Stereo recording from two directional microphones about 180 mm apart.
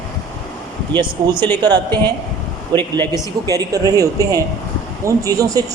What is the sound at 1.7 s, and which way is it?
Speech, 25° right (ahead or behind).